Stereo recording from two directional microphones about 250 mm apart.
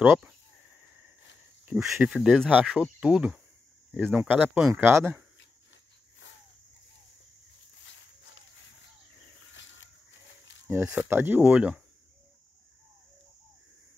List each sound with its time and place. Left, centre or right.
0.0 s speech: centre
1.7 s speech: centre
7.8 s a sound: left
9.5 s cricket: left
10.7 s speech: centre